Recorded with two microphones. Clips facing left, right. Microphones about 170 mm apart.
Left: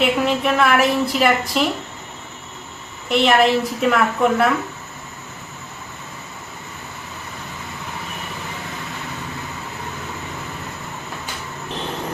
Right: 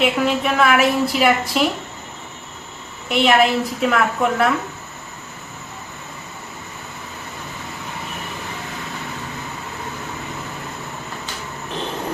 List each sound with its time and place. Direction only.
0.0 s a woman's voice: centre (ahead or behind)
3.1 s a woman's voice: centre (ahead or behind)